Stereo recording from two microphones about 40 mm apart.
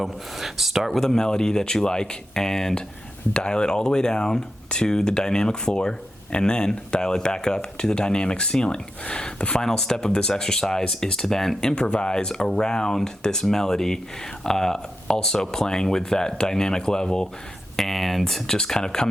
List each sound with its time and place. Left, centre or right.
0.0 s speech: centre
0.9 s speech: centre
9.6 s speech: centre
11.7 s speech: left
17.7 s speech: centre
18.4 s speech: centre